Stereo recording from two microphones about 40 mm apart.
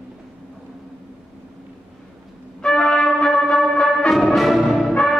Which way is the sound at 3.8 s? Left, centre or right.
Centre.